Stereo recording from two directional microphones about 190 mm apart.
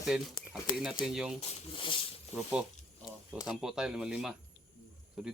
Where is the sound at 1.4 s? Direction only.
30° left (ahead or behind).